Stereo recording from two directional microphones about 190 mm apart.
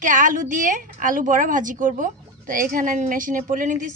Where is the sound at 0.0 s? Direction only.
45° right (ahead or behind).